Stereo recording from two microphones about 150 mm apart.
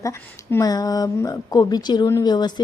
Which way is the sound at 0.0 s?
20° left (ahead or behind).